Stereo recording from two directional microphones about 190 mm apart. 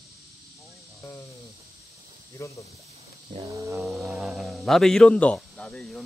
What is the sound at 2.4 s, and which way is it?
Speech, 15° left (ahead or behind).